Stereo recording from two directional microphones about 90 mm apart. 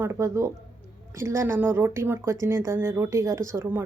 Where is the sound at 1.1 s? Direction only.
30° right (ahead or behind).